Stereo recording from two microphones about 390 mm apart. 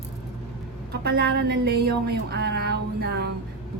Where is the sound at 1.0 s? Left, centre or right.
Right.